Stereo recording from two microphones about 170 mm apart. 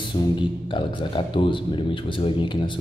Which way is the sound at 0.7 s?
30° left (ahead or behind).